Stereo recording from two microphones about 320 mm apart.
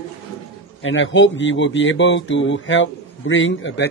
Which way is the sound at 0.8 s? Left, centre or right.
Left.